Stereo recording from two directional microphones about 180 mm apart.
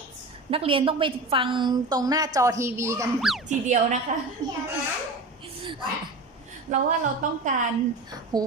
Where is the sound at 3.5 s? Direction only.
40° right (ahead or behind).